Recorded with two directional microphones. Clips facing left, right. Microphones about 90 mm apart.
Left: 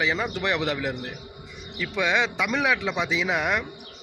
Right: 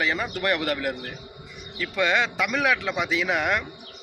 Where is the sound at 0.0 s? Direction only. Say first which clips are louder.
Even; 20° left (ahead or behind).